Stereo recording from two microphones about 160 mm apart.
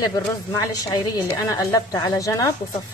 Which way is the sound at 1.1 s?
20° left (ahead or behind).